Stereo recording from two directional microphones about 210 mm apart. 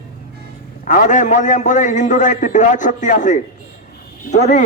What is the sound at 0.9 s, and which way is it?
A man's voice, 35° left (ahead or behind).